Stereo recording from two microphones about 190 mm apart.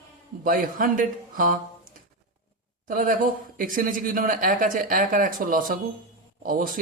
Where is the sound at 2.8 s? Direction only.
45° right (ahead or behind).